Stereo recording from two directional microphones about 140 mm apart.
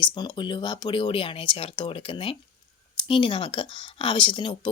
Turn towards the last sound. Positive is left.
turn(degrees=35)  # may be behind; listen again after turning